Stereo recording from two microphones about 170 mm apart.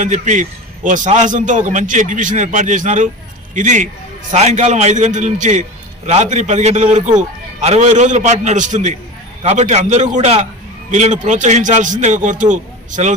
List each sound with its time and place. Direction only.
0.0 s a man's voice: 45° right (ahead or behind)